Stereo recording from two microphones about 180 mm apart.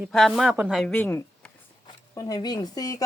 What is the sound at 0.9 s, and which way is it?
Speech, 10° left (ahead or behind).